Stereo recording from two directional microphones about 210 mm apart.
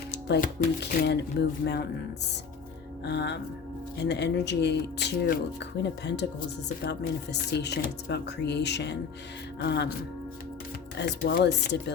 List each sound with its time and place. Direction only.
0.4 s speech: 55° left (ahead or behind)
3.0 s speech: 55° left (ahead or behind)
10.9 s speech: 50° left (ahead or behind)